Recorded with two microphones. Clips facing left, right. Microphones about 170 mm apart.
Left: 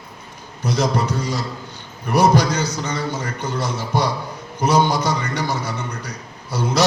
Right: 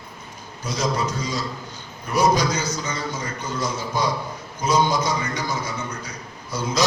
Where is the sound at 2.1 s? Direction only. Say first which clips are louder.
Left 3 dB; 60° left (ahead or behind).